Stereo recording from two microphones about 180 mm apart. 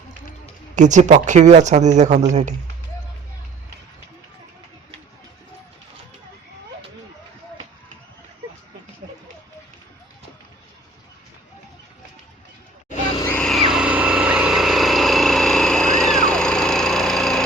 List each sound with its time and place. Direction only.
0.8 s speech: 40° right (ahead or behind)
13.2 s vehicle: 5° left (ahead or behind)